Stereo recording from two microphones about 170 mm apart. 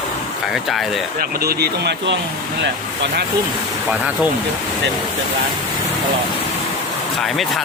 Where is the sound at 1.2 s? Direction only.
65° right (ahead or behind); by 2.2 s 85° right.